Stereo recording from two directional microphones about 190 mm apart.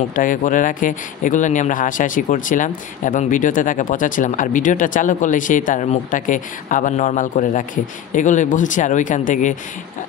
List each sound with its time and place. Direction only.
0.1 s speech: 45° left (ahead or behind)